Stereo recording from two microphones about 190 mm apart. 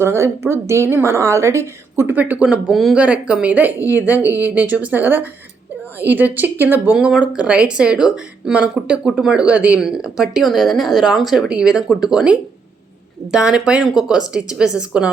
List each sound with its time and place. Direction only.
0.0 s a woman's voice: 15° right (ahead or behind)
3.8 s a woman's voice: 15° left (ahead or behind)
4.0 s a woman's voice: 10° right (ahead or behind)